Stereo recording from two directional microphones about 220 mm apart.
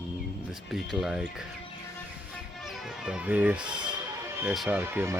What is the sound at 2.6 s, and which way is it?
Speech, centre (ahead or behind).